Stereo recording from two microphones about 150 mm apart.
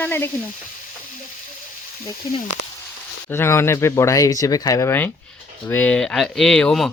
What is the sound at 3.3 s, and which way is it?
Speech, 15° left (ahead or behind).